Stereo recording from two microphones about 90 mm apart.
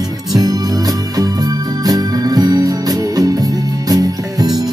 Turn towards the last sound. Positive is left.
turn(degrees=-45)  # may be behind; listen again after turning